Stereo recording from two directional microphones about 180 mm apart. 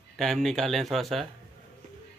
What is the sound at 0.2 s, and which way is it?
Speech, centre (ahead or behind).